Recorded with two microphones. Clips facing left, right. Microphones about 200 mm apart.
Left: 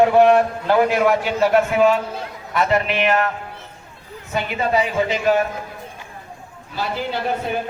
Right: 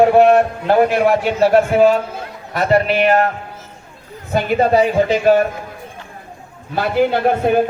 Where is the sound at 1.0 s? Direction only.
35° right (ahead or behind).